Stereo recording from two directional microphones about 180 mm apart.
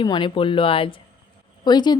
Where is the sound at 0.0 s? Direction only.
25° left (ahead or behind).